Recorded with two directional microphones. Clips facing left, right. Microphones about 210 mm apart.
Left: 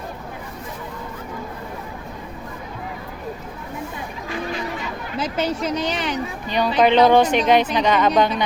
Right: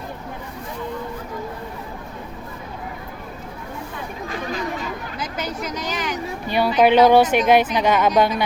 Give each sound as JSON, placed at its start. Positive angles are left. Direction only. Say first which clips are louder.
{"t": 5.2, "sound": "a woman's voice", "louder": "left 6 dB", "side_deg": 30}
{"t": 6.7, "sound": "speech", "louder": "right 1 dB", "side_deg": -10}